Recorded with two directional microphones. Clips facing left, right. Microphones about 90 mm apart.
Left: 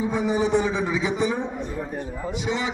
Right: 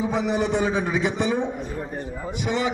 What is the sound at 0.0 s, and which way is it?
A man's voice, 75° right (ahead or behind).